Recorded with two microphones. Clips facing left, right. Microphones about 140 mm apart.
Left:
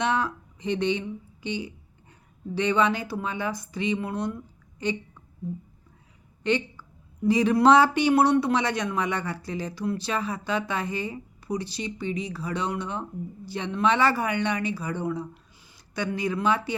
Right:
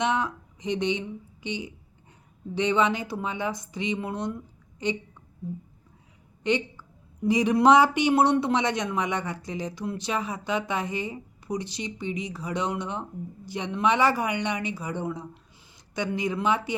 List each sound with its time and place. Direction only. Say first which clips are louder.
0.0 s speech: even; 20° right (ahead or behind)
6.4 s a sound: even; 15° right (ahead or behind)
7.3 s speech: left 1 dB; 15° right (ahead or behind)